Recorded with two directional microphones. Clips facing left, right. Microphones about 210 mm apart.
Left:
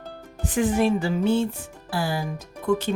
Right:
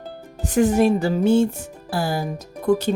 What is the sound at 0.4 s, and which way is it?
Speech, 40° right (ahead or behind).